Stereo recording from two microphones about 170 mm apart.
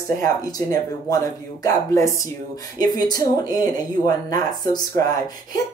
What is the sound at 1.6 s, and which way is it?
Speech, 20° left (ahead or behind).